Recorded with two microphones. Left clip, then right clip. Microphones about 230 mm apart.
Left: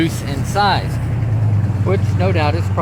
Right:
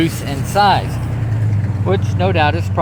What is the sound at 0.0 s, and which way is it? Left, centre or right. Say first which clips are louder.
Speech: right 1 dB; right.